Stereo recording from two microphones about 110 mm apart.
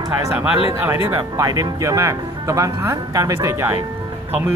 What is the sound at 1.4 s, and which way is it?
Speech, 30° right (ahead or behind).